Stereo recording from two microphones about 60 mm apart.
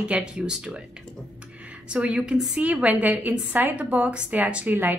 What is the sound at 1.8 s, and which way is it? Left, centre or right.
A woman's voice, centre.